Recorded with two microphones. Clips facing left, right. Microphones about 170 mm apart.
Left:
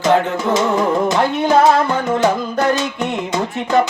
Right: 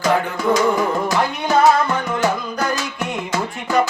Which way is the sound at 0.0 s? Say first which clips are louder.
Left 3 dB; 25° left (ahead or behind).